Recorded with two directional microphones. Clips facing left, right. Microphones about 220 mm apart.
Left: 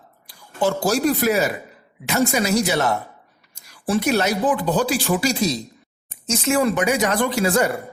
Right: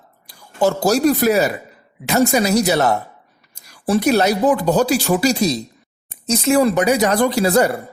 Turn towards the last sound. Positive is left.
turn(degrees=-35)  # may be behind; listen again after turning